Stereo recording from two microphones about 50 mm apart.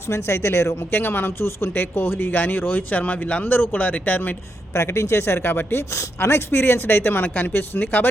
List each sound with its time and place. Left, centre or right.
0.1 s speech: left
0.9 s speech: left
3.4 s speech: left
4.7 s speech: left